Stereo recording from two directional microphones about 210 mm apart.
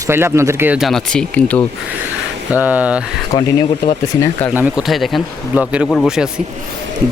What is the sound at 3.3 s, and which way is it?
Speech, 20° left (ahead or behind).